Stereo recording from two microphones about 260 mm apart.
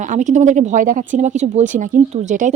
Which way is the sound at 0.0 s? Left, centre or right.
Right.